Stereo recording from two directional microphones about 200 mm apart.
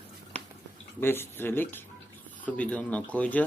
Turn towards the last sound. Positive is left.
turn(degrees=5)  # may be behind; listen again after turning